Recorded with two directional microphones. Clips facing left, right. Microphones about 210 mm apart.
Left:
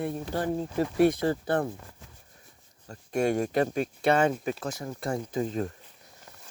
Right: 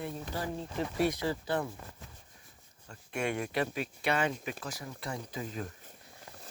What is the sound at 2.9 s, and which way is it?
Speech, 40° left (ahead or behind).